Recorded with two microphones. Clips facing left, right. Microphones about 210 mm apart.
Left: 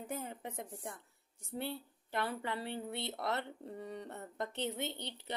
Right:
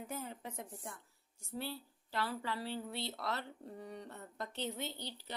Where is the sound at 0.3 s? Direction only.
55° left (ahead or behind).